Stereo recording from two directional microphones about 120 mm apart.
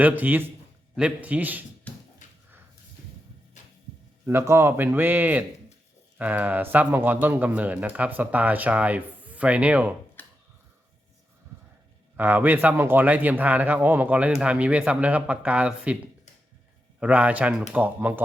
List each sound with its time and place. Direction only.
0.0 s a man's voice: 15° right (ahead or behind)
4.3 s a man's voice: 20° right (ahead or behind)
10.2 s a sound: 15° left (ahead or behind)
12.1 s a man's voice: 15° right (ahead or behind)
17.0 s a man's voice: 10° right (ahead or behind)